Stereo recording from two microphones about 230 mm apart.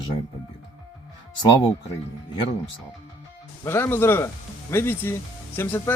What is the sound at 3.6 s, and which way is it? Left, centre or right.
Speech, centre.